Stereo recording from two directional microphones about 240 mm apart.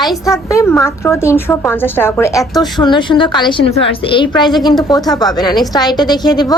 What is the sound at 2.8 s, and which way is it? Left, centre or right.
A woman's voice, centre.